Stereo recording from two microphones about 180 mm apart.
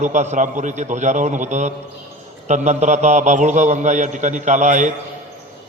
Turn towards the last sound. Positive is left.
turn(degrees=-45)  # may be behind; listen again after turning